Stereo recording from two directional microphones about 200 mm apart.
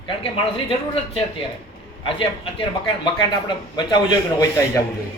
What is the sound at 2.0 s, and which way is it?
A man's voice, 25° left (ahead or behind).